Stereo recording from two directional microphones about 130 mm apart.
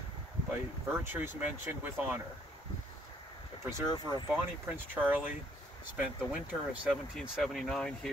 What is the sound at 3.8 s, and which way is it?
Speech, 35° left (ahead or behind).